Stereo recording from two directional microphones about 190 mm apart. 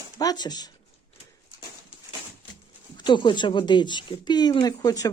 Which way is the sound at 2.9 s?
25° left (ahead or behind).